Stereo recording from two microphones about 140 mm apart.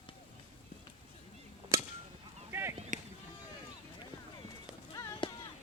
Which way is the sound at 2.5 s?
15° right (ahead or behind).